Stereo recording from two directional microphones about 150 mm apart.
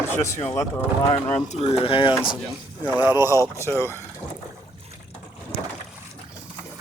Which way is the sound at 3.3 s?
20° left (ahead or behind).